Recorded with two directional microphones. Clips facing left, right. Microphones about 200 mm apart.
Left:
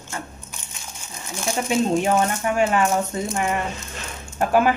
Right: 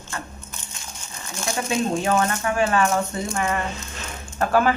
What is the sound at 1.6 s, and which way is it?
Speech, 15° left (ahead or behind).